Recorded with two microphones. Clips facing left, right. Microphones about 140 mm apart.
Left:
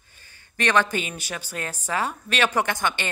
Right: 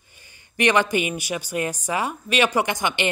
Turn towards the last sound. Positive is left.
turn(degrees=-15)  # may be behind; listen again after turning